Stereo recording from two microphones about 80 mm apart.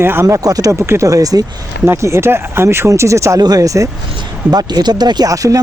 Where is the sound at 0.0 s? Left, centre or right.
Right.